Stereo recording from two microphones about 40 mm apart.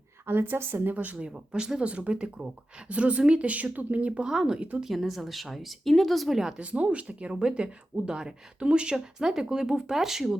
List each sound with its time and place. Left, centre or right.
0.3 s a woman's voice: right
0.9 s speech: right
1.2 s speech: centre
1.8 s speech: right
4.2 s speech: centre
4.8 s a woman's voice: centre
6.6 s speech: right
7.3 s speech: right
9.2 s speech: centre